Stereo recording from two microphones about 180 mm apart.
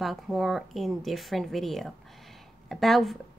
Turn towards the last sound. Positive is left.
turn(degrees=0)  # may be behind; listen again after turning